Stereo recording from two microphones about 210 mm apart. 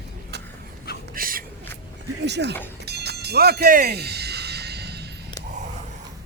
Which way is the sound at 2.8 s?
50° right (ahead or behind).